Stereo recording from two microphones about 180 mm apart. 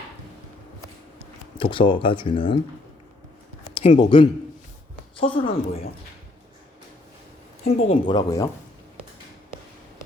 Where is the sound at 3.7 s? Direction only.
30° left (ahead or behind).